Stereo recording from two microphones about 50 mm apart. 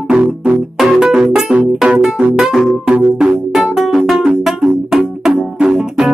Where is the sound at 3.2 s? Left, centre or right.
Centre.